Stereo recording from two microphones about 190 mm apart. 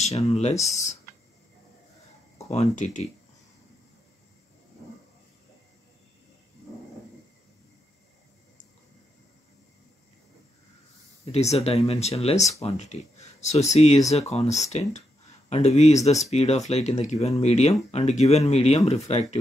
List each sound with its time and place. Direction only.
0.3 s speech: 35° left (ahead or behind)
2.5 s speech: 35° left (ahead or behind)
11.3 s speech: 35° left (ahead or behind)